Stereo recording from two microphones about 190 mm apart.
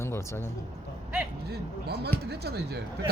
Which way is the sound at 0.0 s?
15° left (ahead or behind).